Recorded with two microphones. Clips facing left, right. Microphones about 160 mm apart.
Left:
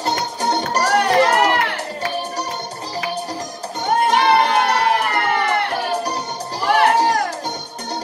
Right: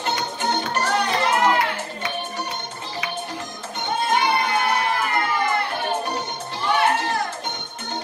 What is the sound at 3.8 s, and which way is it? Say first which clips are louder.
Music: left 6 dB; 75° left (ahead or behind).